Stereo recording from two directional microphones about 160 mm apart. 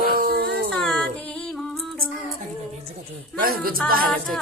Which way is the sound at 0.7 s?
5° left (ahead or behind).